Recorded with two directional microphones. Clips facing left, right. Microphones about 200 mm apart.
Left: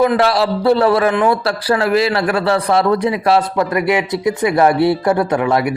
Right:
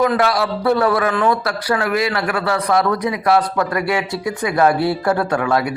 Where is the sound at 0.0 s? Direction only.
30° left (ahead or behind).